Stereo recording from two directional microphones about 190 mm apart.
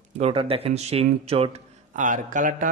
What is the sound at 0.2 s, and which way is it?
A man's voice, 30° right (ahead or behind).